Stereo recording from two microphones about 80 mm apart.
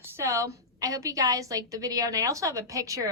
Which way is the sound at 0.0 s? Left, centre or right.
Right.